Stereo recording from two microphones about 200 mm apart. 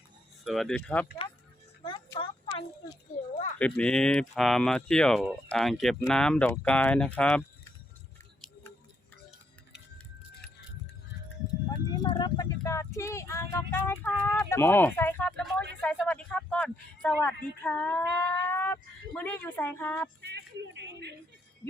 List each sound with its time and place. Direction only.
0.4 s speech: centre (ahead or behind)
1.8 s music: 25° left (ahead or behind)
3.6 s speech: 5° left (ahead or behind)
11.9 s a sound: 20° left (ahead or behind); by 15.6 s 5° left (ahead or behind)
15.8 s speech: 5° left (ahead or behind)
20.2 s speech: 60° right (ahead or behind)